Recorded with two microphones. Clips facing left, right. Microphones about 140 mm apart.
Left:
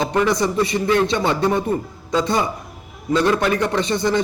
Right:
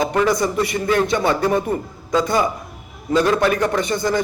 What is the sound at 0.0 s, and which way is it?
Speech, 25° left (ahead or behind).